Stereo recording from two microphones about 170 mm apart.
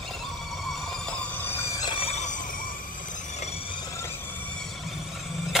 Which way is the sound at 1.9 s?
35° left (ahead or behind).